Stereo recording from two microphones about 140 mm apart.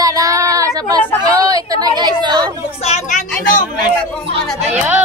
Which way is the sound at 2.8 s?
55° left (ahead or behind).